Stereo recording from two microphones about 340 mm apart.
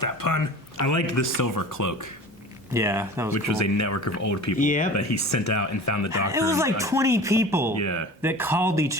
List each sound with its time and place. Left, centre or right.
0.0 s speech: left
0.9 s speech: left
2.7 s speech: centre
3.3 s speech: left
4.5 s speech: left
4.9 s speech: left
6.1 s speech: centre
7.8 s speech: left
8.2 s speech: centre